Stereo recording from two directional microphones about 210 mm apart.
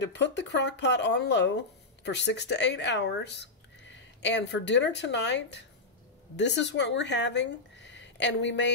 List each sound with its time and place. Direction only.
0.1 s speech: 55° left (ahead or behind)